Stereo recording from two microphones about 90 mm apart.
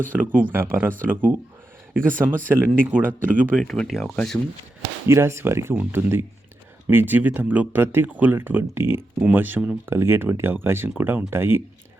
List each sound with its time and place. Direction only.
0.1 s speech: 20° right (ahead or behind)
3.5 s speech: 5° left (ahead or behind)
4.1 s speech: 10° left (ahead or behind)
5.0 s speech: 30° right (ahead or behind)